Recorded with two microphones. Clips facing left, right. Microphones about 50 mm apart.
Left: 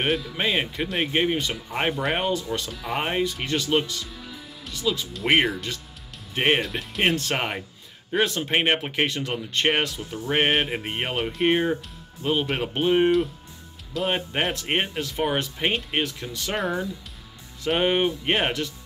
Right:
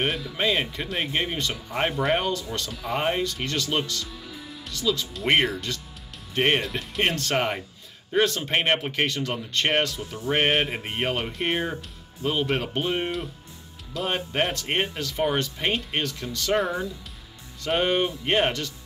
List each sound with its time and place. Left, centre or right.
0.4 s speech: centre
0.7 s speech: centre
1.1 s speech: centre
2.1 s speech: centre
2.7 s speech: centre
3.0 s speech: centre
13.9 s speech: centre
17.6 s speech: centre